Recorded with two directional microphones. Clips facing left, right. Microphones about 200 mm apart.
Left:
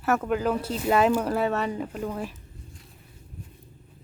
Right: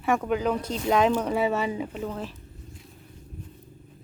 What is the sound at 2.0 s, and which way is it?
Speech, 10° left (ahead or behind).